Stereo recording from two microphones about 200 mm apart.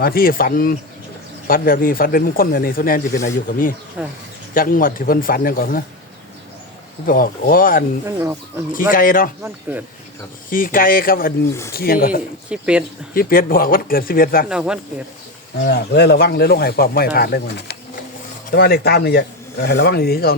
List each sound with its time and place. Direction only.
0.0 s speech: 45° left (ahead or behind)
4.0 s speech: 5° right (ahead or behind)
4.5 s speech: 45° left (ahead or behind)
7.0 s speech: 45° left (ahead or behind)
8.0 s speech: 15° right (ahead or behind)
8.9 s speech: 45° left (ahead or behind)
9.4 s speech: 10° right (ahead or behind)
10.5 s speech: 45° left (ahead or behind)
12.5 s speech: 5° right (ahead or behind)
13.1 s speech: 45° left (ahead or behind)
14.5 s speech: 5° right (ahead or behind)
15.6 s speech: 55° left (ahead or behind)